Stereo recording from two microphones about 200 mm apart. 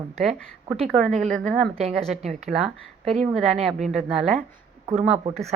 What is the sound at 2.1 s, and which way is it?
Speech, centre (ahead or behind).